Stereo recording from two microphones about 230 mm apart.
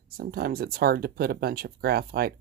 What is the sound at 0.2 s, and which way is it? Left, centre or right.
Speech, right.